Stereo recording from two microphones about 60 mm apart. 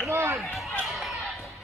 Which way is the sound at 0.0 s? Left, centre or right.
Right.